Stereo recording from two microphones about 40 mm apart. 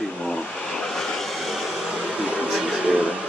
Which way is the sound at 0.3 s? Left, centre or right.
Left.